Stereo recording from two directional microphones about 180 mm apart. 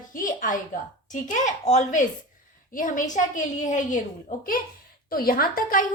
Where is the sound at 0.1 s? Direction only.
50° left (ahead or behind).